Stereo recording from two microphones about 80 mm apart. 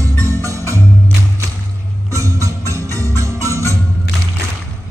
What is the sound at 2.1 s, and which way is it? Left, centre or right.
Music, right.